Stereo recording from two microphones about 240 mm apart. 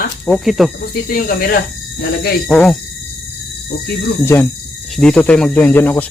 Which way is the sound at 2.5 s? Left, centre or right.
Centre.